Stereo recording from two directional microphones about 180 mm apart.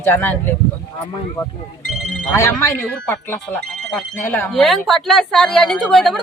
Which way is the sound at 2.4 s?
15° left (ahead or behind).